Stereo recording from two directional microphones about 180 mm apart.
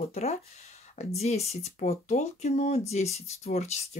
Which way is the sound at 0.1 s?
35° left (ahead or behind).